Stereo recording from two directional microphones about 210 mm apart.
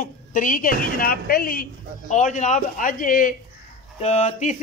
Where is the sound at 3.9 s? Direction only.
30° left (ahead or behind).